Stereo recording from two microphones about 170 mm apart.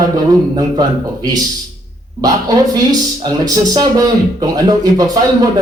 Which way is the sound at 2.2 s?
20° right (ahead or behind).